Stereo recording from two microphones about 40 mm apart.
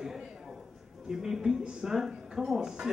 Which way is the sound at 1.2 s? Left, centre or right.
Centre.